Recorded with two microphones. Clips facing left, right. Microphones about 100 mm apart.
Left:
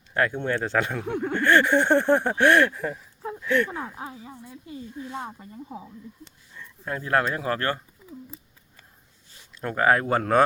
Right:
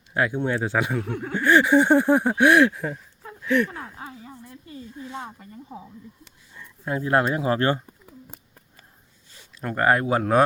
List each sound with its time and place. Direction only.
0.1 s speech: 10° right (ahead or behind)
1.2 s a sound: 5° right (ahead or behind)
3.4 s speech: 5° right (ahead or behind)
3.7 s speech: 15° left (ahead or behind)
6.6 s speech: 10° right (ahead or behind)
9.6 s a sound: 5° right (ahead or behind)